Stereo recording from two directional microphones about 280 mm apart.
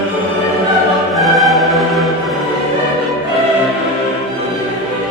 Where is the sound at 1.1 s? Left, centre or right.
Centre.